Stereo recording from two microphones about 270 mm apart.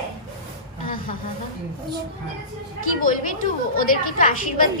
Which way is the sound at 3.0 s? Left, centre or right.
Left.